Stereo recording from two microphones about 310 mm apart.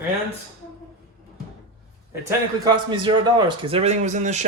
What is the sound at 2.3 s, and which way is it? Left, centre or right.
A man's voice, centre.